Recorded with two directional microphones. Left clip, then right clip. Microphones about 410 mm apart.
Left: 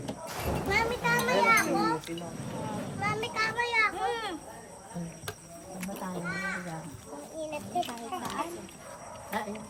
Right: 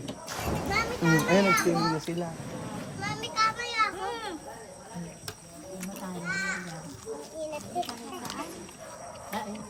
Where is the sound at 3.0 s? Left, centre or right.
Centre.